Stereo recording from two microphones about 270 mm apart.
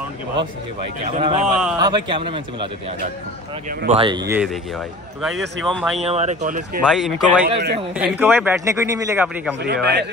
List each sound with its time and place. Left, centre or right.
1.1 s speech: right
1.4 s speech: centre
1.8 s a man's voice: centre
3.8 s a man's voice: centre
4.4 s speech: centre
5.9 s speech: right
6.8 s speech: centre
7.4 s speech: right
8.0 s a man's voice: centre
9.6 s speech: right